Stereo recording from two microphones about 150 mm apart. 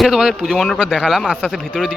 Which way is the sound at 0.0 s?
5° right (ahead or behind).